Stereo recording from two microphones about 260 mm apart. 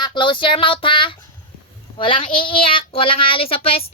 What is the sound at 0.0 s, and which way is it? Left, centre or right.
A woman's voice, centre.